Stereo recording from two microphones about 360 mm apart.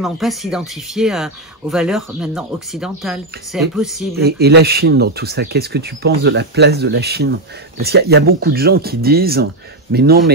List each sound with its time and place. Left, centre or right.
0.0 s speech: centre
4.2 s speech: right